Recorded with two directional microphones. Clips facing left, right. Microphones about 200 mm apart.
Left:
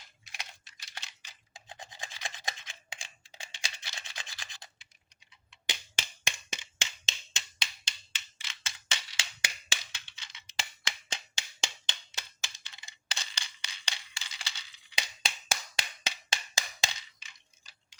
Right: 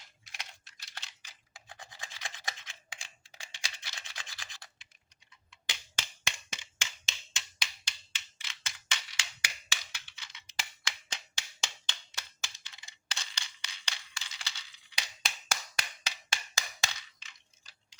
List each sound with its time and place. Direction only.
0.3 s computer keyboard: 15° left (ahead or behind)
5.6 s finger snapping: 20° left (ahead or behind)
8.4 s a sound: 25° left (ahead or behind)
15.7 s wood block: 25° left (ahead or behind)
17.2 s coin: 10° left (ahead or behind)